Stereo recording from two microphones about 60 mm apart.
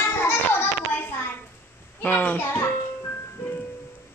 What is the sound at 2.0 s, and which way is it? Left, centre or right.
Speech, left.